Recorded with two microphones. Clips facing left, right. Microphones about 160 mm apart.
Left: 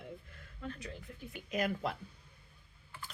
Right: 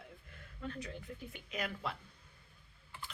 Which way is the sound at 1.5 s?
40° left (ahead or behind).